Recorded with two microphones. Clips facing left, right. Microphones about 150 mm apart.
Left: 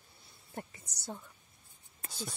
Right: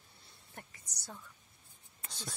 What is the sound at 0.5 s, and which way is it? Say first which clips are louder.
Speech: left 9 dB; 25° left (ahead or behind).